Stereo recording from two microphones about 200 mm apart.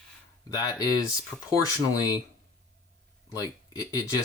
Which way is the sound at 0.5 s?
15° left (ahead or behind).